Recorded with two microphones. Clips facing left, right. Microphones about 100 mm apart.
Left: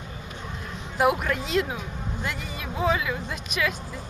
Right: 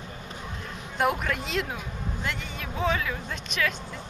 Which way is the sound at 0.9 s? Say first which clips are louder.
Left 3 dB; 5° left (ahead or behind).